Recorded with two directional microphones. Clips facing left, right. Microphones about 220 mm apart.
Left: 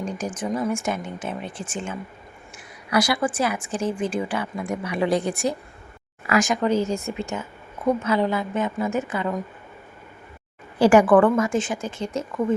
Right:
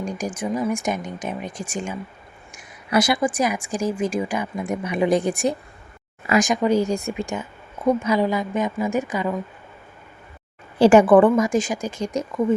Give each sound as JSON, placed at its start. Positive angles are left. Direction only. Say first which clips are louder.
{"t": 0.0, "sound": "speech", "louder": "right 1 dB", "side_deg": -10}
{"t": 10.8, "sound": "a woman's voice", "louder": "right 2 dB", "side_deg": -25}
{"t": 11.3, "sound": "speech", "louder": "right 2 dB", "side_deg": -15}